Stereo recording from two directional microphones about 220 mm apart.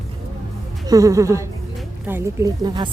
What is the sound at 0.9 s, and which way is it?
A woman's voice, 15° right (ahead or behind).